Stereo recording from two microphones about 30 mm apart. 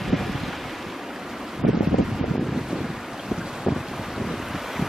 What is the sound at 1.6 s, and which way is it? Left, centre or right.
Wind, right.